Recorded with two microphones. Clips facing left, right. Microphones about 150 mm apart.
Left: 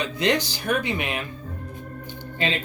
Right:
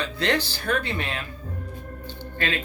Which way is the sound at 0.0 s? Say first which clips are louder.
Left 2 dB; 15° left (ahead or behind).